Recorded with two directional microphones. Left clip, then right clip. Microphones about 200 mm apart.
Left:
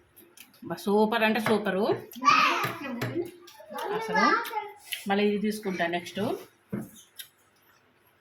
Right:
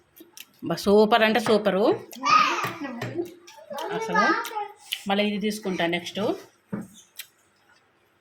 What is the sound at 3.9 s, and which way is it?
A child's voice, 50° right (ahead or behind).